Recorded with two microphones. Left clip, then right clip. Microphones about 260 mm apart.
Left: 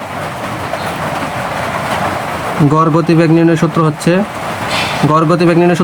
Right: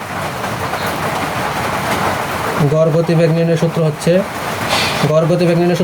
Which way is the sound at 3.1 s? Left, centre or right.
Centre.